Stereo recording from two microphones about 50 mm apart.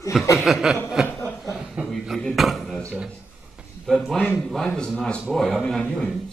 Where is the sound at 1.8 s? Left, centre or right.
Right.